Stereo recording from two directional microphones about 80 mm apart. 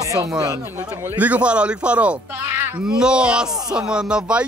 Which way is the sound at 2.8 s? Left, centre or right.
Centre.